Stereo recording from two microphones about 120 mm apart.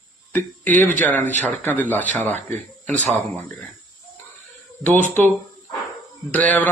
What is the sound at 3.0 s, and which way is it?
Speech, 70° right (ahead or behind).